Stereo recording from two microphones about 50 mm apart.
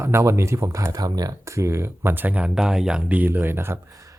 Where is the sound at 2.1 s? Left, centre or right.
Right.